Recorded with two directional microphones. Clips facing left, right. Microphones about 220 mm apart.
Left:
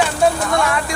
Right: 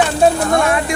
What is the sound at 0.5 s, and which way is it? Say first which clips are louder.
Speech: right 4 dB; 25° right (ahead or behind).